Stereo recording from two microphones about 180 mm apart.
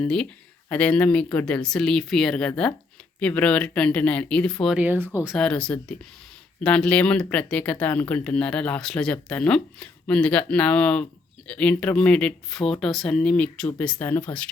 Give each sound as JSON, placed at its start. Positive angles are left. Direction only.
{"t": 0.0, "sound": "speech", "side_deg": 5}